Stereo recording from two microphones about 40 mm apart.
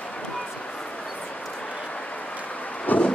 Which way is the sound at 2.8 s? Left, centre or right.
Left.